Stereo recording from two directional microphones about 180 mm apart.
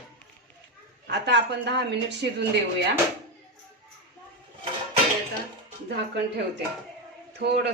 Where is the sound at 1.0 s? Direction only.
70° right (ahead or behind).